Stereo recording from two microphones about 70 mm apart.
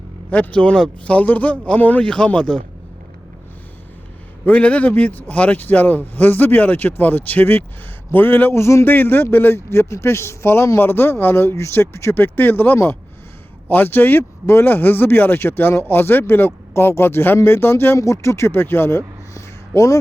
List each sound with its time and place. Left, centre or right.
0.3 s a man's voice: centre
4.4 s a man's voice: left
8.9 s a man's voice: left